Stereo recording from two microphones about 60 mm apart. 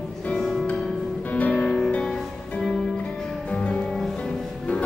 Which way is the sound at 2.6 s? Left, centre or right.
Centre.